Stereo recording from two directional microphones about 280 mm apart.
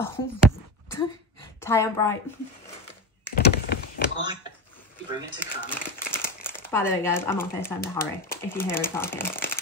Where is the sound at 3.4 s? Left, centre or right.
Left.